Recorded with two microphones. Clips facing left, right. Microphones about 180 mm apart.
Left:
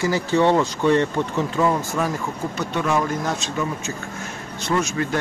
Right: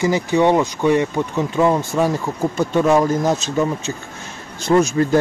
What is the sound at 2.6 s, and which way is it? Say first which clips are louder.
Speech: right 7 dB; 40° right (ahead or behind).